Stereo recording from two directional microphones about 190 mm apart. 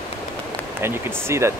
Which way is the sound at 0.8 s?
10° right (ahead or behind).